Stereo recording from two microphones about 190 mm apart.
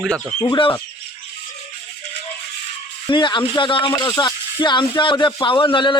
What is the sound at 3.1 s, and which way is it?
A man's voice, 25° left (ahead or behind).